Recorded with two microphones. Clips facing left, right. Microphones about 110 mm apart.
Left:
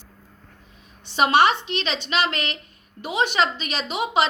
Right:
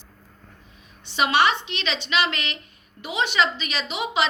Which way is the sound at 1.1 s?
40° left (ahead or behind).